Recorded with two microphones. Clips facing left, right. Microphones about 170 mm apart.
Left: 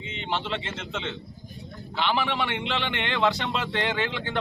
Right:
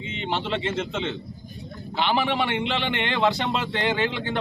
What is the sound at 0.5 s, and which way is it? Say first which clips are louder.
Speech: right 6 dB; 40° right (ahead or behind).